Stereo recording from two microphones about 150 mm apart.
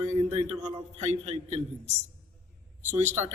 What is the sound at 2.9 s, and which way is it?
Speech, 50° right (ahead or behind).